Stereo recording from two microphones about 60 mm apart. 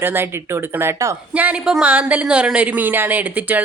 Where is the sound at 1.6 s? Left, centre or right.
Centre.